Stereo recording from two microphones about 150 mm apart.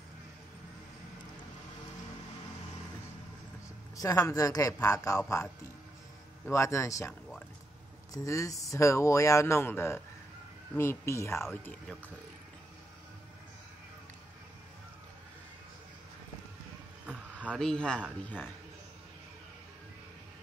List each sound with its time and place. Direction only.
3.9 s speech: 20° left (ahead or behind)
6.4 s speech: 20° left (ahead or behind)
17.0 s a sound: 10° right (ahead or behind)
17.6 s speech: 5° left (ahead or behind)